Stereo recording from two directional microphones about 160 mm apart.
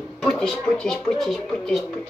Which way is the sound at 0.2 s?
5° left (ahead or behind).